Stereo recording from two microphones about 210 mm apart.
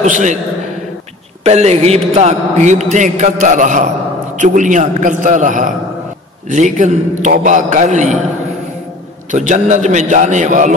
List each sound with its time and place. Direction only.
0.0 s a man's voice: 35° right (ahead or behind)
1.4 s a man's voice: 30° right (ahead or behind)
9.3 s a man's voice: 35° right (ahead or behind)